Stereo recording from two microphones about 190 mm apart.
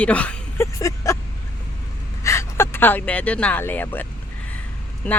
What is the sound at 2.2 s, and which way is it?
Speech, 15° left (ahead or behind).